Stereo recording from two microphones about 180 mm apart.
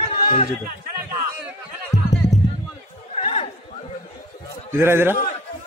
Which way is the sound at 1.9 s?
70° left (ahead or behind).